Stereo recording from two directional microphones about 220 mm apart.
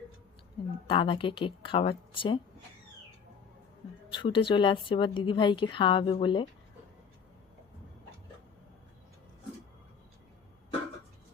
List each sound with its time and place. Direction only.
0.9 s speech: 25° left (ahead or behind)
4.1 s speech: 20° left (ahead or behind)